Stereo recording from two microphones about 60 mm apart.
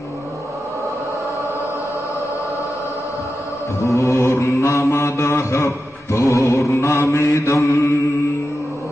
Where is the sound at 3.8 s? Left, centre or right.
Left.